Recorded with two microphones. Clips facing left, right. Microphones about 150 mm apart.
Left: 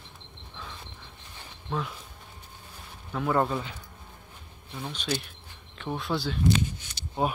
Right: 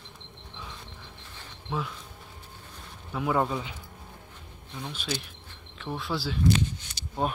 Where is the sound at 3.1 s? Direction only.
5° right (ahead or behind).